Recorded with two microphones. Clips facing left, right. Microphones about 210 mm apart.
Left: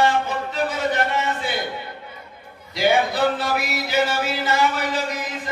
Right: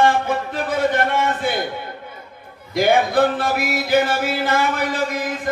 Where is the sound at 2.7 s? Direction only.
50° right (ahead or behind).